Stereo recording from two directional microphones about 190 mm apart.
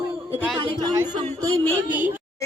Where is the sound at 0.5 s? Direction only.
25° right (ahead or behind).